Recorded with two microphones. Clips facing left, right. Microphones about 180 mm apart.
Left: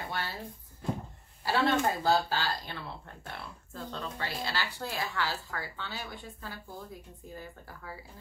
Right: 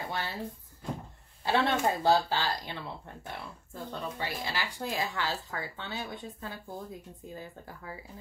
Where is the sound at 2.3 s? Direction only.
20° right (ahead or behind).